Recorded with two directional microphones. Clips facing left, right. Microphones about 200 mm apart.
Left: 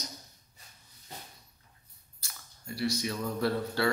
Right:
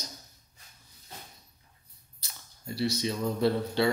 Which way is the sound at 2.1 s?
25° right (ahead or behind).